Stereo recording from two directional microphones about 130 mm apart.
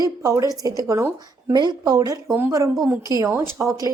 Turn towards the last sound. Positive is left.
turn(degrees=-25)  # may be behind; listen again after turning